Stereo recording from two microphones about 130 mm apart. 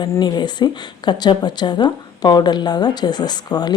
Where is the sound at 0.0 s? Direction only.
35° left (ahead or behind).